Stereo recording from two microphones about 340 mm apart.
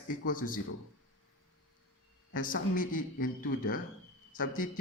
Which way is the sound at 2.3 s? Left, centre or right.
Left.